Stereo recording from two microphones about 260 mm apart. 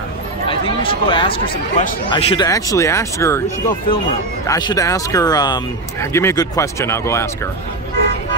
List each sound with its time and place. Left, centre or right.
0.5 s speech: centre
3.4 s speech: left